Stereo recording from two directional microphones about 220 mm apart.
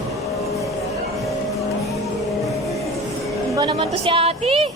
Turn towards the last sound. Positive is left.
turn(degrees=-25)  # may be behind; listen again after turning